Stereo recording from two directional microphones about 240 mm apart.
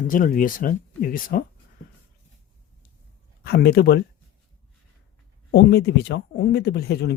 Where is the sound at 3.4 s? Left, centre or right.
Left.